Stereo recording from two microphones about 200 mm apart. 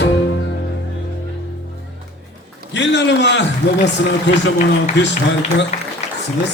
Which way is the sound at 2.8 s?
60° left (ahead or behind).